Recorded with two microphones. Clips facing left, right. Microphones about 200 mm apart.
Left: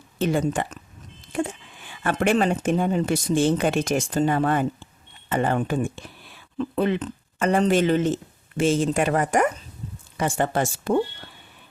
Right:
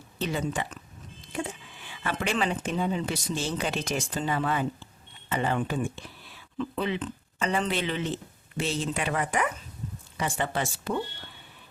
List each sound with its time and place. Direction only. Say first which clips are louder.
0.2 s speech: left 7 dB; 50° left (ahead or behind)
1.9 s speech: left 8 dB; 50° left (ahead or behind)